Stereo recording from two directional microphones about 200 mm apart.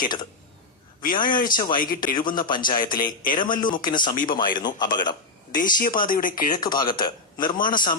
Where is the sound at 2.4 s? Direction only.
20° left (ahead or behind).